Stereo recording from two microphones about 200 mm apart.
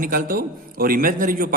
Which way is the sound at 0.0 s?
45° right (ahead or behind).